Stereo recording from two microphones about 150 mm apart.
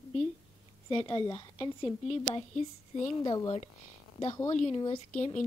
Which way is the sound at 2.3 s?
50° left (ahead or behind).